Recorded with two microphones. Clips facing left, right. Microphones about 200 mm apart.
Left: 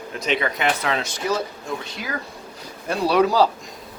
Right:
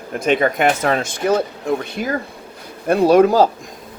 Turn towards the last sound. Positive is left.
turn(degrees=-50)  # may be behind; listen again after turning